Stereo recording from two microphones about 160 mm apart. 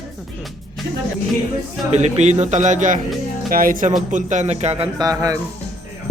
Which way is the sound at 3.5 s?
60° right (ahead or behind).